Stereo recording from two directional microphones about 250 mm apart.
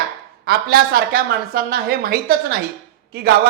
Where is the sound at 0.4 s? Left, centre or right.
Right.